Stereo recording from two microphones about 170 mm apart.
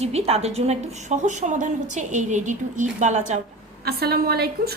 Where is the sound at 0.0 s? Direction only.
35° right (ahead or behind).